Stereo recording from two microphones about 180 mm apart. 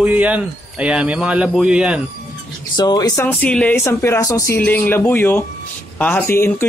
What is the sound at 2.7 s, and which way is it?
Speech, 20° left (ahead or behind).